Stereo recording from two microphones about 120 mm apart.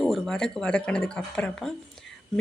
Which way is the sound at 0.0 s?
5° left (ahead or behind).